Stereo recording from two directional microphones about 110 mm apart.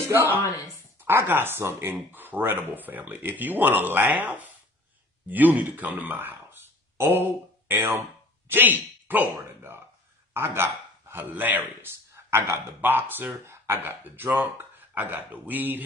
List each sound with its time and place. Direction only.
0.0 s a man's voice: 20° right (ahead or behind)